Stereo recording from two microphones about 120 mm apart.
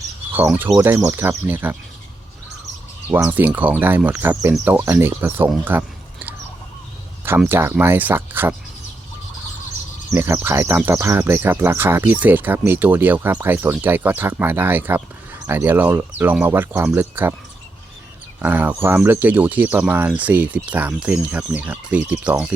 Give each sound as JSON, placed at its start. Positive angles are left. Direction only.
{"t": 0.8, "sound": "speech", "side_deg": -20}
{"t": 3.2, "sound": "speech", "side_deg": -15}
{"t": 5.6, "sound": "a sound", "side_deg": -15}
{"t": 7.3, "sound": "speech", "side_deg": -15}
{"t": 10.2, "sound": "speech", "side_deg": -20}
{"t": 18.4, "sound": "speech", "side_deg": -15}